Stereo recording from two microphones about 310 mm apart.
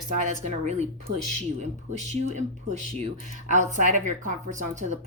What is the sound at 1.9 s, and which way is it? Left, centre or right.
Speech, right.